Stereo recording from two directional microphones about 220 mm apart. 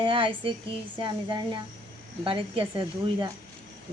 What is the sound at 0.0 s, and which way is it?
A woman's voice, 25° right (ahead or behind).